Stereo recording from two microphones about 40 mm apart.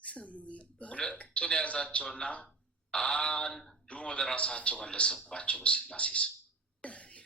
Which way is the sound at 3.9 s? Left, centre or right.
Left.